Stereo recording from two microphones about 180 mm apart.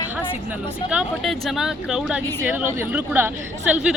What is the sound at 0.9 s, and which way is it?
A woman's voice, centre (ahead or behind).